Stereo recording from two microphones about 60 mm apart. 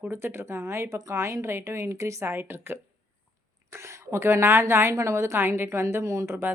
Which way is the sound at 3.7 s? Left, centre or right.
Right.